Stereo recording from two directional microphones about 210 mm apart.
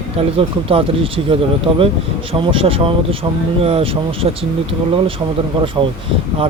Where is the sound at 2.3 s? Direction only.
25° right (ahead or behind).